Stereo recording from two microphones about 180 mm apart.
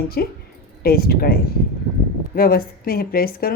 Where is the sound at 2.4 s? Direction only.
55° left (ahead or behind).